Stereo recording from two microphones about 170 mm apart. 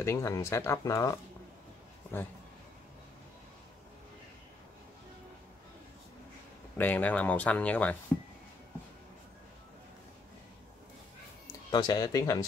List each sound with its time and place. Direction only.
0.0 s speech: 20° left (ahead or behind)
6.8 s speech: 10° left (ahead or behind)
11.7 s speech: 25° left (ahead or behind)